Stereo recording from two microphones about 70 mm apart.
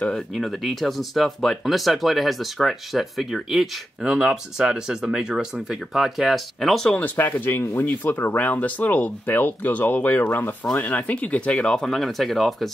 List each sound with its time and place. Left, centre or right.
0.4 s speech: centre
7.0 s speech: left
11.5 s speech: centre